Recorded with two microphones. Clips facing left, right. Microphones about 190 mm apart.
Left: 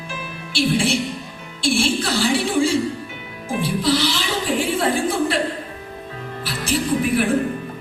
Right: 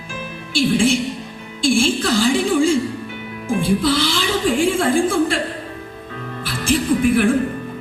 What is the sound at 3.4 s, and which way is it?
Music, 50° right (ahead or behind).